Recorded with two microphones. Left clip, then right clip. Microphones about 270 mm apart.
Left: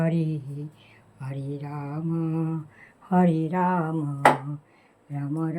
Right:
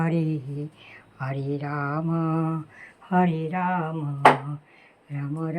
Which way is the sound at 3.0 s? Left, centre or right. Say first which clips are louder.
Even; centre.